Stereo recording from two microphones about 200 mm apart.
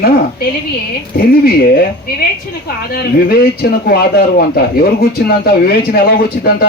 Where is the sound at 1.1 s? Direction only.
50° left (ahead or behind).